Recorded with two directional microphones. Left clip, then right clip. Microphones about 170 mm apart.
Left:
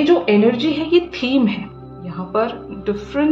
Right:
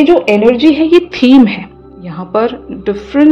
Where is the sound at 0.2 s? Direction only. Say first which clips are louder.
Right 7 dB; 45° right (ahead or behind).